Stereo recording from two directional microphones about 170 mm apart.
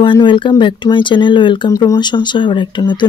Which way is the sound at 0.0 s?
30° left (ahead or behind).